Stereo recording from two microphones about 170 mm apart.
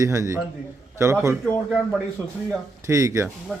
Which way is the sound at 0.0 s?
15° right (ahead or behind).